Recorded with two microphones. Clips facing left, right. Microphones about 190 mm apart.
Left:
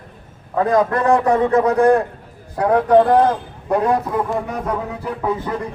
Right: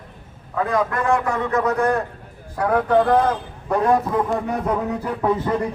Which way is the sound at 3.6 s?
15° left (ahead or behind).